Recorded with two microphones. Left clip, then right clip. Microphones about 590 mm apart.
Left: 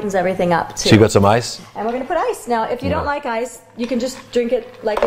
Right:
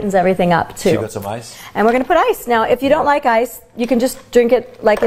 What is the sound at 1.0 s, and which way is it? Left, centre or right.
Speech, left.